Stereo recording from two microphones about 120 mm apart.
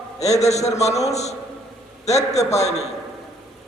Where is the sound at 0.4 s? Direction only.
70° left (ahead or behind).